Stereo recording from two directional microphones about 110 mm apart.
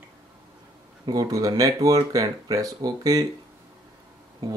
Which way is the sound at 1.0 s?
40° right (ahead or behind).